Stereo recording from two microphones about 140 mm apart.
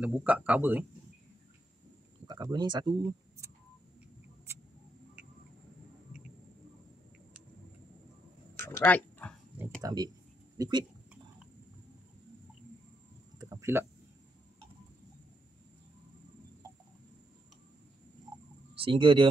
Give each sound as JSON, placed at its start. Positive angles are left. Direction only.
{"t": 0.0, "sound": "speech", "side_deg": -10}
{"t": 2.2, "sound": "speech", "side_deg": -30}
{"t": 4.5, "sound": "mouse", "side_deg": -20}
{"t": 8.5, "sound": "a sound", "side_deg": 15}
{"t": 9.8, "sound": "speech", "side_deg": -25}
{"t": 13.4, "sound": "a sound", "side_deg": -20}
{"t": 18.9, "sound": "speech", "side_deg": -35}